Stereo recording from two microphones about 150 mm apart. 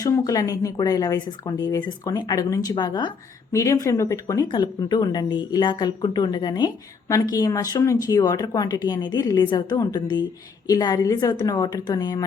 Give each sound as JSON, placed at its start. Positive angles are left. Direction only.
{"t": 0.0, "sound": "speech", "side_deg": 25}